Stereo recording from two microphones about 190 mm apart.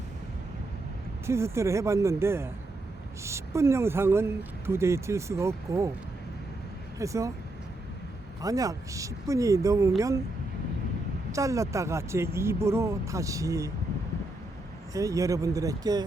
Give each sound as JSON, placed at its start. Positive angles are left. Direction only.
{"t": 1.3, "sound": "a woman's voice", "side_deg": -15}
{"t": 7.0, "sound": "a woman's voice", "side_deg": -15}
{"t": 8.4, "sound": "a woman's voice", "side_deg": -20}
{"t": 11.3, "sound": "a woman's voice", "side_deg": -15}
{"t": 14.9, "sound": "a woman's voice", "side_deg": -15}